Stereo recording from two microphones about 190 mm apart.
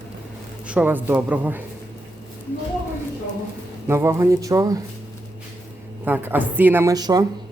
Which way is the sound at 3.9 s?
15° right (ahead or behind).